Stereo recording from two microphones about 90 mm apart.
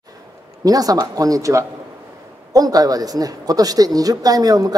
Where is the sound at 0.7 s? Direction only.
45° right (ahead or behind).